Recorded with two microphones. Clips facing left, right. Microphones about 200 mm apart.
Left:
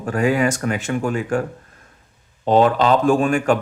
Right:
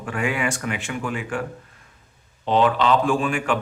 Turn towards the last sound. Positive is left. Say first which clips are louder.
# left 5 dB
turn(degrees=45)  # may be behind; listen again after turning